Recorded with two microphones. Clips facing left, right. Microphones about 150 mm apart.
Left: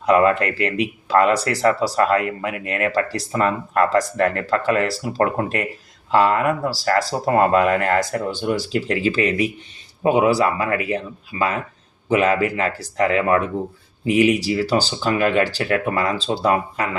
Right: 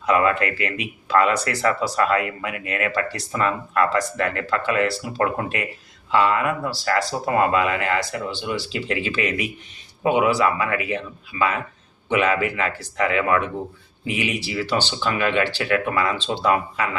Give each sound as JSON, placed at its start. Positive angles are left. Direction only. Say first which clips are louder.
{"t": 0.0, "sound": "speech", "louder": "left 4 dB", "side_deg": 35}